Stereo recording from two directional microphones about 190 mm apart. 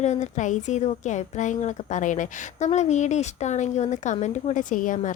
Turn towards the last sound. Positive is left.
turn(degrees=45)  # may be behind; listen again after turning